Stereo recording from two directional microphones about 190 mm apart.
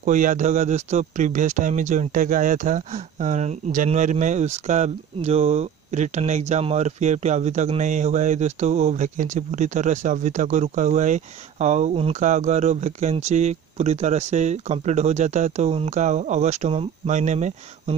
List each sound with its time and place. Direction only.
0.0 s speech: 45° right (ahead or behind)